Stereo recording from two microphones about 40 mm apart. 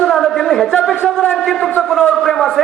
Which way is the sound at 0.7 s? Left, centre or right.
Left.